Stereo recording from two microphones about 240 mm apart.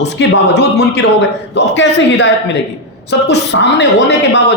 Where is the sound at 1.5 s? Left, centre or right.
Left.